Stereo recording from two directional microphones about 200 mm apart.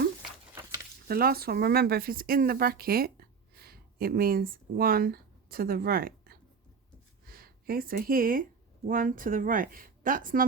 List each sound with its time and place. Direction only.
1.0 s speech: 50° right (ahead or behind)